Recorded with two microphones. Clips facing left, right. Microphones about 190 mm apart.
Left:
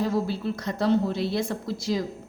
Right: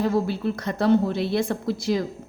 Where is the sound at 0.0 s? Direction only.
60° right (ahead or behind).